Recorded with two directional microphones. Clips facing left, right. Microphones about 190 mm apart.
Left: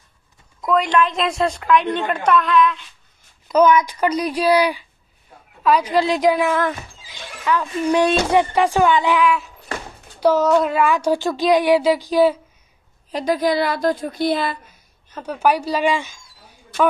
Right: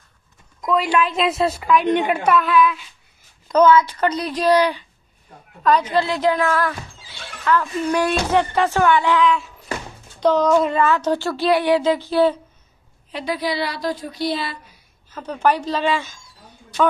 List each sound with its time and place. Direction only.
0.6 s a woman's voice: centre (ahead or behind)
3.4 s speech: 10° left (ahead or behind)
13.1 s speech: 45° left (ahead or behind)
15.1 s speech: 10° left (ahead or behind)